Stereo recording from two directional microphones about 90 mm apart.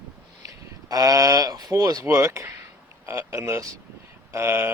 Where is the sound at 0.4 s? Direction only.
45° right (ahead or behind).